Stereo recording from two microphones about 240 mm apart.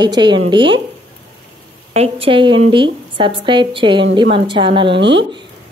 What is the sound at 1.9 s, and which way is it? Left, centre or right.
A woman's voice, right.